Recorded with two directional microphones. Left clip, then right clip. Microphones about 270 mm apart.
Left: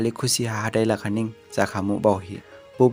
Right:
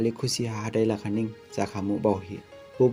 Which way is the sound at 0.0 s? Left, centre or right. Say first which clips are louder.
Left 3 dB; left.